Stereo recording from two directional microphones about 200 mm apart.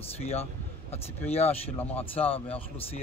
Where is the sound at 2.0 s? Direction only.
30° left (ahead or behind).